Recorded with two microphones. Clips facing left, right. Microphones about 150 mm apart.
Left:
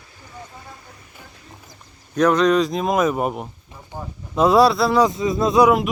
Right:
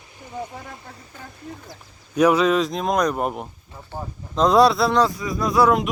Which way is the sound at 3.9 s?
15° right (ahead or behind).